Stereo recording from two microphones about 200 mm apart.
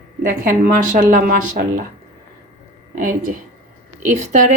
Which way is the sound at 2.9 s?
40° right (ahead or behind).